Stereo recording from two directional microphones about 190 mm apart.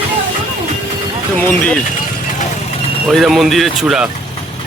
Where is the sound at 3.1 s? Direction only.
Centre (ahead or behind).